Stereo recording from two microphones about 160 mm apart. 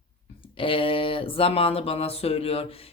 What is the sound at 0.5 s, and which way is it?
Speech, 35° left (ahead or behind).